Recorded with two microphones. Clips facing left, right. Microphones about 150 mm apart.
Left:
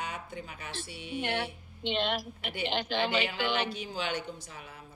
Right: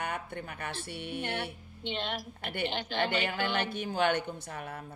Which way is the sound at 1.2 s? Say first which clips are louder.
Left 2 dB; 90° left.